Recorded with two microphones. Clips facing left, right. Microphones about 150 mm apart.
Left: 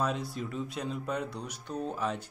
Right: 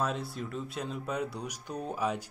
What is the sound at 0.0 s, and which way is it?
Speech, centre (ahead or behind).